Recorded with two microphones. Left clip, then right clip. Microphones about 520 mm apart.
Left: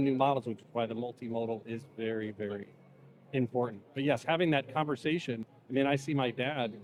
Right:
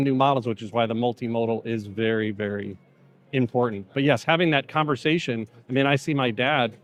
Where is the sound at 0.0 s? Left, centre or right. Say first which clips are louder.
Right 7 dB; right.